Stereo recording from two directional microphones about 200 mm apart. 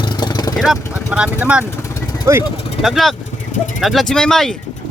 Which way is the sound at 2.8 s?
Centre (ahead or behind).